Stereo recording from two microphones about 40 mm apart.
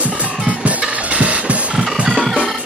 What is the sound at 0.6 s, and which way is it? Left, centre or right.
Music, right.